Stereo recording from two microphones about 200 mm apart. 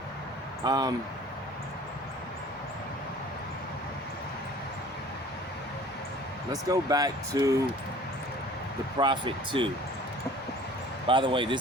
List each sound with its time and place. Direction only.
0.6 s speech: 20° right (ahead or behind)
6.5 s speech: 20° right (ahead or behind)
9.0 s speech: 25° right (ahead or behind)
11.0 s speech: 25° right (ahead or behind)